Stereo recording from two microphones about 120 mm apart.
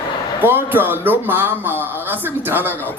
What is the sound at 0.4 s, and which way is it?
A man's voice, 15° right (ahead or behind).